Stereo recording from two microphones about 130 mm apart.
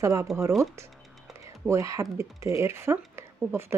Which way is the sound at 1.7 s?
25° right (ahead or behind).